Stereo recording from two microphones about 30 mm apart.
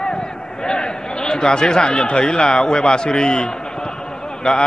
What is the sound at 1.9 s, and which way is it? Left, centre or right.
A man's voice, left.